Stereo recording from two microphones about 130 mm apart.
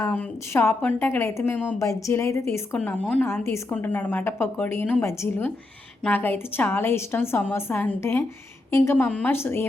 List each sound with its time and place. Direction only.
0.1 s a woman's voice: 15° left (ahead or behind)
2.7 s a woman's voice: 10° left (ahead or behind)
3.2 s a woman's voice: 20° left (ahead or behind)